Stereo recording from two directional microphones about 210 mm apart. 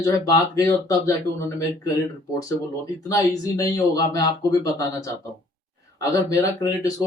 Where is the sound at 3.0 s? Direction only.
15° left (ahead or behind).